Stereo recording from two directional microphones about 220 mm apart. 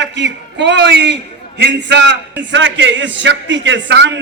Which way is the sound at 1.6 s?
55° right (ahead or behind).